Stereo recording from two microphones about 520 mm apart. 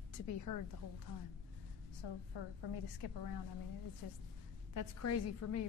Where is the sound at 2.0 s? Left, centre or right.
Left.